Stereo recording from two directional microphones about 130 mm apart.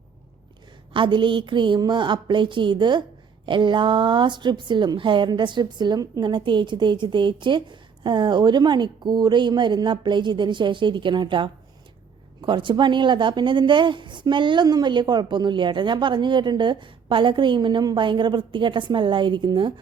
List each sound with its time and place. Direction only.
0.9 s a woman's voice: 40° right (ahead or behind)